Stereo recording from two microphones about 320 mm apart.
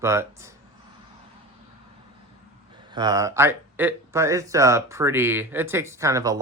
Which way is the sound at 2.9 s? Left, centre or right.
Centre.